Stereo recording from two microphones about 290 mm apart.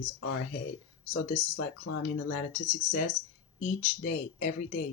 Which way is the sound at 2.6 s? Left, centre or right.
Left.